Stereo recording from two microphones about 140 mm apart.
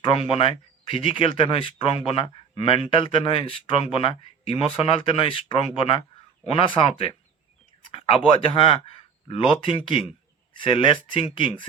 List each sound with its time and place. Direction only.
0.0 s speech: 40° left (ahead or behind)
7.9 s speech: 40° left (ahead or behind)